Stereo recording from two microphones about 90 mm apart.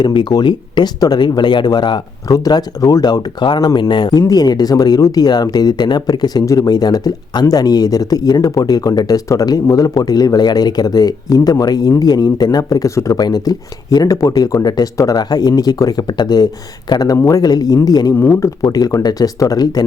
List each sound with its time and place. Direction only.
0.0 s speech: 60° left (ahead or behind)
2.2 s speech: 40° left (ahead or behind)
13.1 s speech: 50° left (ahead or behind)